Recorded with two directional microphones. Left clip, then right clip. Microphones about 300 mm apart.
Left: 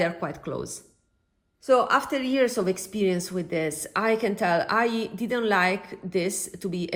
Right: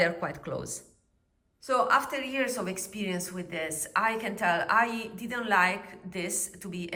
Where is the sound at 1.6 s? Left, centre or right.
Centre.